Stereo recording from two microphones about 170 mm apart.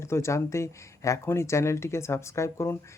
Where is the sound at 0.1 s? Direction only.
15° left (ahead or behind).